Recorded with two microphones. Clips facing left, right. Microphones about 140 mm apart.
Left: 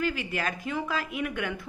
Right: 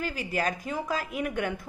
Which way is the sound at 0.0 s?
40° right (ahead or behind).